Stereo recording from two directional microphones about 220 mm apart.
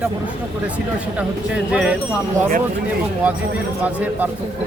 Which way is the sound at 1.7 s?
5° right (ahead or behind).